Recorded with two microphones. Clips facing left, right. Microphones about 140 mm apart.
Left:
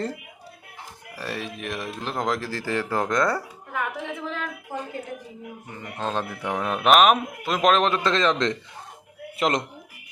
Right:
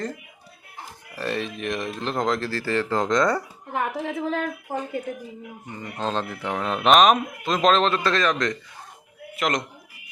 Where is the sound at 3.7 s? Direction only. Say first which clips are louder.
Right 3 dB; 30° right (ahead or behind); by 4.8 s 50° right (ahead or behind).